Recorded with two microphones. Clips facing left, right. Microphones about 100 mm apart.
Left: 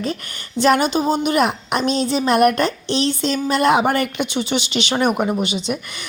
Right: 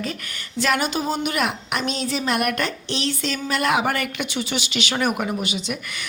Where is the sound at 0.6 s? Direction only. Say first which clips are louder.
Left 6 dB; 30° left (ahead or behind).